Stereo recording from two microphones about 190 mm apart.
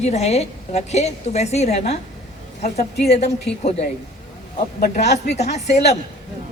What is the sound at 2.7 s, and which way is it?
Speech, 55° left (ahead or behind).